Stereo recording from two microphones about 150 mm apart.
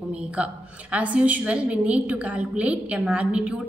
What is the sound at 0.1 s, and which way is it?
A woman's voice, 10° right (ahead or behind).